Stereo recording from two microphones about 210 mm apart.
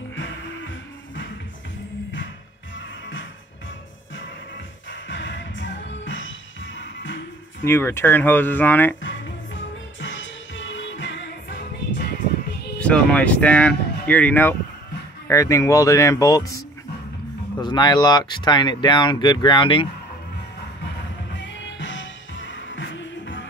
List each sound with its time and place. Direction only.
0.1 s music: 65° left (ahead or behind)
5.0 s music: 60° left (ahead or behind)
7.6 s speech: 10° left (ahead or behind)
9.0 s music: 60° left (ahead or behind)
12.7 s speech: 5° left (ahead or behind); by 19.9 s 25° left (ahead or behind)
21.7 s music: 60° left (ahead or behind)